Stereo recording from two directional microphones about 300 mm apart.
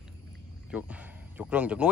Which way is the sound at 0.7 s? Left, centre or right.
Centre.